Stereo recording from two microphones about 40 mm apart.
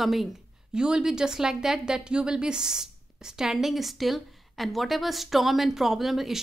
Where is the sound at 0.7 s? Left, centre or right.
Centre.